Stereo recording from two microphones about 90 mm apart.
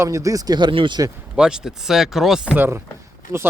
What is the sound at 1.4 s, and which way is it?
Speech, 5° right (ahead or behind).